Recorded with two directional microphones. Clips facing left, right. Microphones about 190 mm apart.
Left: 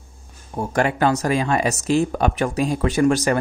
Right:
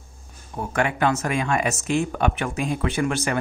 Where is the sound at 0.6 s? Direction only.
35° left (ahead or behind).